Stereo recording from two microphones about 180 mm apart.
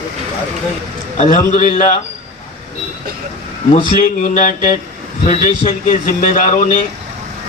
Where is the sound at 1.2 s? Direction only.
45° left (ahead or behind).